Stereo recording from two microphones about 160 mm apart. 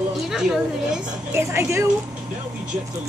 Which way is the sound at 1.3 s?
15° right (ahead or behind).